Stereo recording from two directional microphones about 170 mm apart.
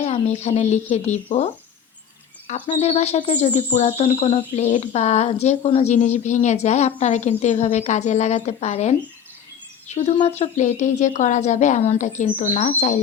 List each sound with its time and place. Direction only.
0.0 s speech: 40° left (ahead or behind)
2.7 s speech: 40° left (ahead or behind)